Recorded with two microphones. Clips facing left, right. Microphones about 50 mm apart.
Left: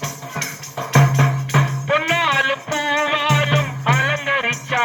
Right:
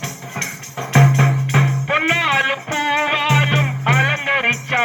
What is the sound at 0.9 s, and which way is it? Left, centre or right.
Music, centre.